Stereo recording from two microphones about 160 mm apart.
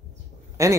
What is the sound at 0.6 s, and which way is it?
Speech, 20° right (ahead or behind).